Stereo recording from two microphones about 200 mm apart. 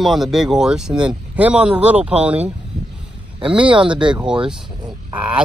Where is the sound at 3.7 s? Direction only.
25° right (ahead or behind).